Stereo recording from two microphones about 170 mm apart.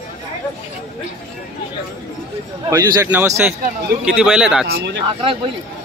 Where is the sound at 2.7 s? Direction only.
15° right (ahead or behind).